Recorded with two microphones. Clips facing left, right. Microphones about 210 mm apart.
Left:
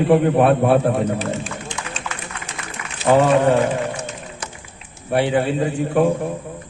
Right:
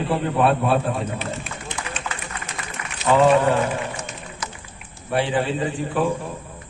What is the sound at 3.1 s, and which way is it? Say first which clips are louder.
Speech: left 4 dB; 65° left (ahead or behind).